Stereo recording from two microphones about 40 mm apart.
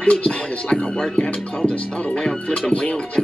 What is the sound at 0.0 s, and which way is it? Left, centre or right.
Speech, left.